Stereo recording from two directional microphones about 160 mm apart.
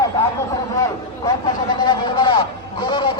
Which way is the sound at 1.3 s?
25° left (ahead or behind).